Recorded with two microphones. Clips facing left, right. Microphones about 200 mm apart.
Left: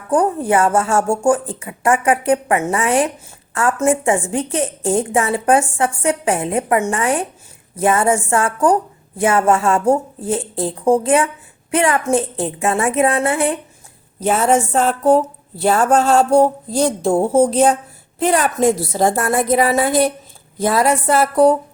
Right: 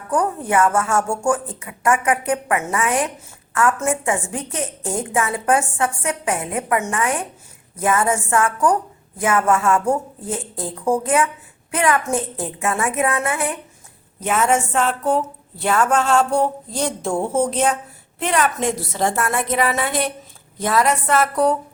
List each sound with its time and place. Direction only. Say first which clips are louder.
0.1 s a woman's voice: left 4 dB; 30° left (ahead or behind)